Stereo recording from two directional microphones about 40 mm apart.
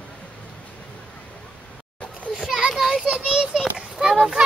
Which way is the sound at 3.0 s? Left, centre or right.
Centre.